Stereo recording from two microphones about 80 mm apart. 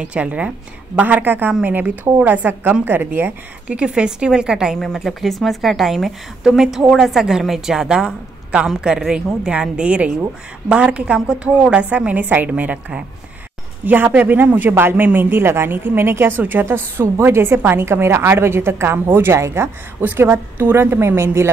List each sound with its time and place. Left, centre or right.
0.0 s a woman's voice: centre
4.7 s a woman's voice: centre; by 21.5 s right